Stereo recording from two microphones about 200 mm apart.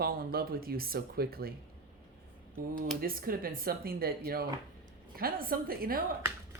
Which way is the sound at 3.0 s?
45° right (ahead or behind).